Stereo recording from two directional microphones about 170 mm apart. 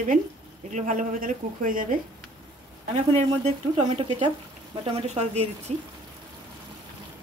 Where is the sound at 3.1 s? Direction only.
35° right (ahead or behind).